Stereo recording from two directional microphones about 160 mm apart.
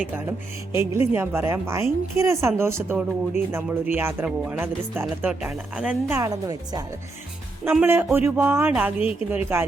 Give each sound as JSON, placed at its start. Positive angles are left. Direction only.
{"t": 0.2, "sound": "speech", "side_deg": -15}
{"t": 7.6, "sound": "speech", "side_deg": -15}